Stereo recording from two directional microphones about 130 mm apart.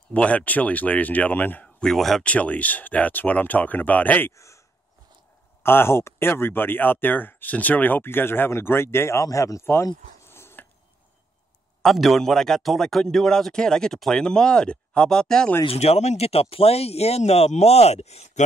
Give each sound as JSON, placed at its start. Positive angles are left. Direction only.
{"t": 0.1, "sound": "speech", "side_deg": 10}
{"t": 5.6, "sound": "speech", "side_deg": 20}
{"t": 11.8, "sound": "speech", "side_deg": 0}
{"t": 15.6, "sound": "speech", "side_deg": 50}